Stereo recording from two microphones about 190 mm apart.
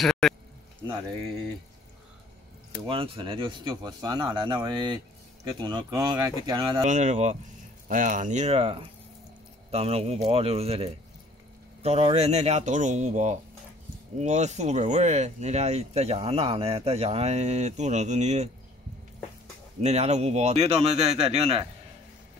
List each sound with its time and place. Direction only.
0.0 s speech: centre (ahead or behind)
2.9 s a man's voice: 30° right (ahead or behind)
6.8 s speech: 40° right (ahead or behind)
19.8 s speech: 35° right (ahead or behind)